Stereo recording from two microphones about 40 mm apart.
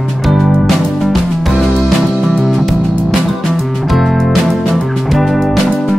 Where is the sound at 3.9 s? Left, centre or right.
Centre.